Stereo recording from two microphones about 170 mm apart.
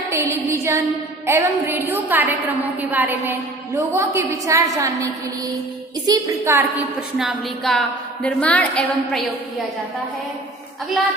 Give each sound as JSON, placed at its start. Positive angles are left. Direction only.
{"t": 0.1, "sound": "music", "side_deg": -15}
{"t": 1.3, "sound": "a woman's voice", "side_deg": -15}
{"t": 6.1, "sound": "a woman's voice", "side_deg": -20}
{"t": 7.2, "sound": "a woman's voice", "side_deg": 0}